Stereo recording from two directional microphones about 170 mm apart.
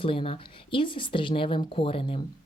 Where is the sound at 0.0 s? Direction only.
30° left (ahead or behind).